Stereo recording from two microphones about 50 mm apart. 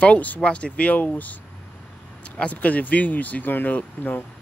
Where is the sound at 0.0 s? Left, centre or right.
Left.